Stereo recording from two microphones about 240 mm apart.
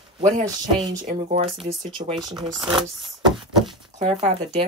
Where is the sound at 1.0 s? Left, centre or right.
Right.